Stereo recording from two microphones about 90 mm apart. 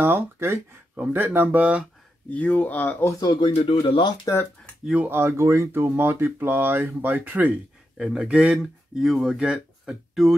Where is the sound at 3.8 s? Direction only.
90° left.